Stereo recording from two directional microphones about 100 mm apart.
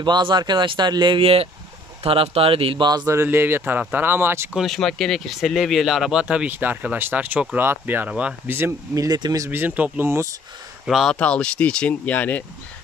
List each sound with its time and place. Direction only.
0.0 s speech: 50° right (ahead or behind)
2.0 s speech: 70° right (ahead or behind)
3.1 s speech: 25° right (ahead or behind)
4.6 s speech: centre (ahead or behind); by 8.1 s 20° right (ahead or behind)
8.1 s speech: 10° right (ahead or behind)
8.5 s speech: 25° right (ahead or behind)
8.9 s speech: 40° right (ahead or behind)
9.5 s speech: 20° right (ahead or behind)
10.9 s speech: centre (ahead or behind)
11.1 s speech: 10° left (ahead or behind)